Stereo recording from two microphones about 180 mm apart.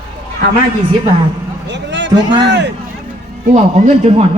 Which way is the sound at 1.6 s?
75° right (ahead or behind).